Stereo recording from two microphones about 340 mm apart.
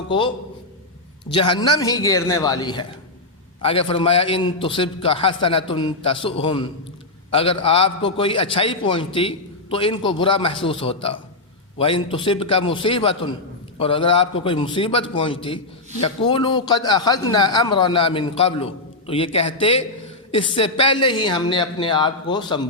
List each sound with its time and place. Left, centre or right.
1.3 s a man's voice: centre